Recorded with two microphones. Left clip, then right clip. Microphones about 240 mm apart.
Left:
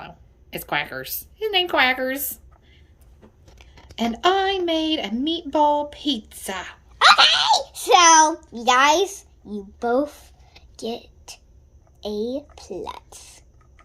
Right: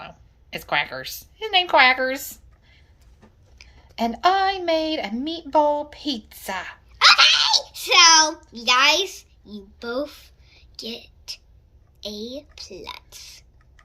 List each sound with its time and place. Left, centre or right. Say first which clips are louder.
0.0 s a woman's voice: even; centre
7.0 s a child's voice: even; left